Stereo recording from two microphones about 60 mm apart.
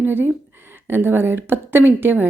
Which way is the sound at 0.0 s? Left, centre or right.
Right.